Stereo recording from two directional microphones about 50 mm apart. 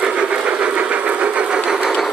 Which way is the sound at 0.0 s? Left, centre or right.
Centre.